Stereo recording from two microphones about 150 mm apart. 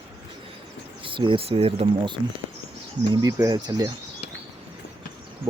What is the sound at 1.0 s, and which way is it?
Speech, 35° right (ahead or behind).